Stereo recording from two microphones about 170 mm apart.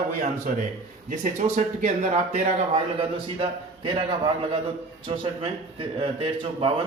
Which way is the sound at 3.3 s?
30° right (ahead or behind).